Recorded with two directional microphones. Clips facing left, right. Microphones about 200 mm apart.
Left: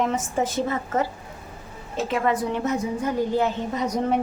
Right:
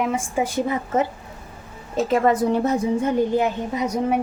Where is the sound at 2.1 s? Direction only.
40° right (ahead or behind).